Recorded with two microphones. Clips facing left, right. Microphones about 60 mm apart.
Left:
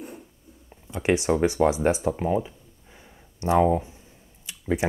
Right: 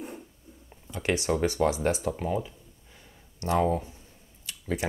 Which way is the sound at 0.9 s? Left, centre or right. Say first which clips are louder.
Left 5 dB; centre.